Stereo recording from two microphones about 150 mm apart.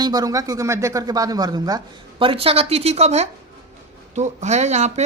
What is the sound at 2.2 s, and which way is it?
A woman's voice, 35° right (ahead or behind).